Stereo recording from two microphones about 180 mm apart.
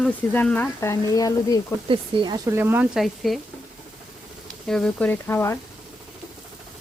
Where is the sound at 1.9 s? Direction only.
25° right (ahead or behind).